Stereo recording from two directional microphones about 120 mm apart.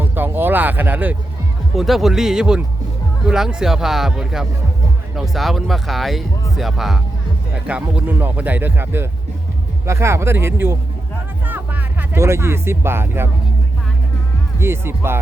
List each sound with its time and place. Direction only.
0.0 s a sound: 15° right (ahead or behind)
1.7 s speech: centre (ahead or behind); by 13.3 s 20° right (ahead or behind)
14.6 s speech: 20° right (ahead or behind)